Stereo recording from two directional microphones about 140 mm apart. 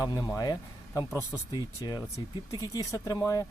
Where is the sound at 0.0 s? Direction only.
30° left (ahead or behind).